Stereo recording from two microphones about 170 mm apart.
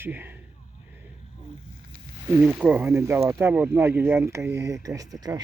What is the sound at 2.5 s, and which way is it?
Speech, 10° right (ahead or behind).